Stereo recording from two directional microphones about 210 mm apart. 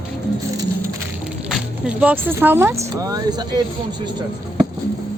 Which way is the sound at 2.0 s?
10° right (ahead or behind).